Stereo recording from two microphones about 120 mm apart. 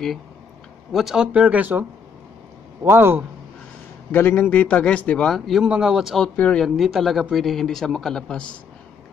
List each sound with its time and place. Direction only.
0.9 s a man's voice: 5° right (ahead or behind); by 3.3 s 20° right (ahead or behind)
4.1 s a man's voice: 15° left (ahead or behind)
5.3 s speech: centre (ahead or behind)
6.2 s a man's voice: 10° left (ahead or behind)
6.6 s speech: centre (ahead or behind)